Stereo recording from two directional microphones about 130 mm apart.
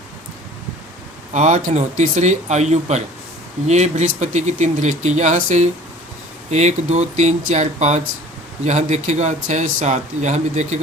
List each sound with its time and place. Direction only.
1.3 s speech: 65° right (ahead or behind)